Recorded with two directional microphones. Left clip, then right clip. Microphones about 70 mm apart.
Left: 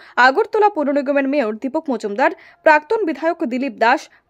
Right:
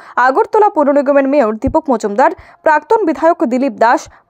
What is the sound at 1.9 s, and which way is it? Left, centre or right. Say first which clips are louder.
A woman's voice: right 5 dB; right.